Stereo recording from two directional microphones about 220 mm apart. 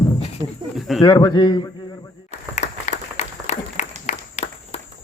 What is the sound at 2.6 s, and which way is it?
Applause, 30° left (ahead or behind).